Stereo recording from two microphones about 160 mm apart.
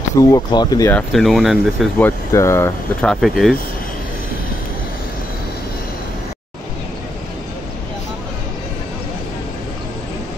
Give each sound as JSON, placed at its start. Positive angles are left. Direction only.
{"t": 0.2, "sound": "speech", "side_deg": 25}
{"t": 0.9, "sound": "speech", "side_deg": 0}
{"t": 2.0, "sound": "speech", "side_deg": 15}
{"t": 3.0, "sound": "speech", "side_deg": 5}